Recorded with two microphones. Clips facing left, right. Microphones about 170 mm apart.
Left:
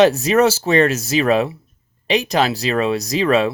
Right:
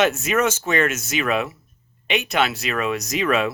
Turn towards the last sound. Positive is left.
turn(degrees=35)  # may be behind; listen again after turning